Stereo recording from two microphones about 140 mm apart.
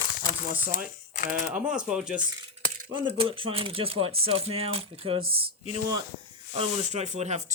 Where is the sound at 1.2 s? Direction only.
65° left (ahead or behind).